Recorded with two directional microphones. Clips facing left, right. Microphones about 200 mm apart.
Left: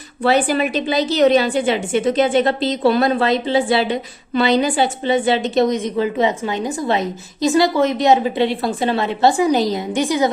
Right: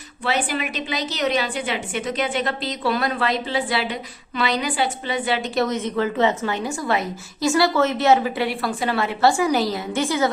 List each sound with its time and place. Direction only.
0.2 s a woman's voice: 35° left (ahead or behind); by 10.2 s 15° left (ahead or behind)